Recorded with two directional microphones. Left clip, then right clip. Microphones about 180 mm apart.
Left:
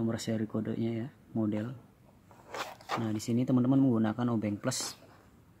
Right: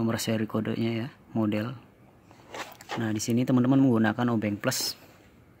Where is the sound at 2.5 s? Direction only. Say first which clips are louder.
Even; 30° left (ahead or behind).